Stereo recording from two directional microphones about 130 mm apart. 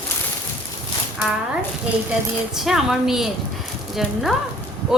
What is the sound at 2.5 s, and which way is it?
Speech, 5° right (ahead or behind).